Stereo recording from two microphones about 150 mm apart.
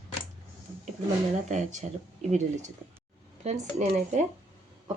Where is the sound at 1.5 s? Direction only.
55° right (ahead or behind).